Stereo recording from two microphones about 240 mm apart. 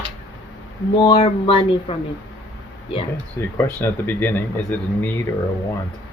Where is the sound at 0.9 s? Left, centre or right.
Left.